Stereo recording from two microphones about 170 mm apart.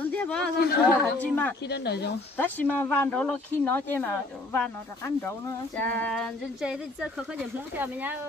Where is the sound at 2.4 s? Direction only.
10° left (ahead or behind).